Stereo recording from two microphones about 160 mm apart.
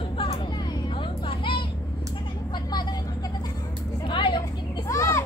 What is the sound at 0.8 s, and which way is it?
Vehicle, 30° left (ahead or behind).